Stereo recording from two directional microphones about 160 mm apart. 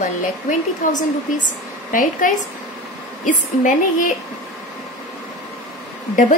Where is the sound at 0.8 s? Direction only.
55° left (ahead or behind).